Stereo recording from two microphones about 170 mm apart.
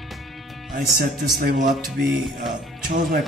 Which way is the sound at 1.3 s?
60° right (ahead or behind).